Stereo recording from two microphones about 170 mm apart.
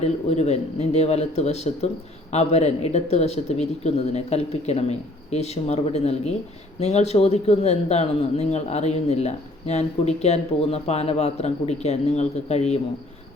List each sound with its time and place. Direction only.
0.0 s speech: 40° left (ahead or behind)